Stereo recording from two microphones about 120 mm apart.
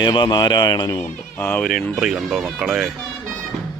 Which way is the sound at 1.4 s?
15° left (ahead or behind).